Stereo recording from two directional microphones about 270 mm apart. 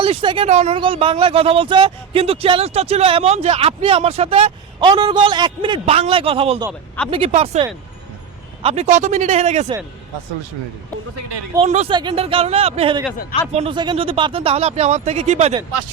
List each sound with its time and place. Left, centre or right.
0.0 s speech: centre
11.5 s speech: right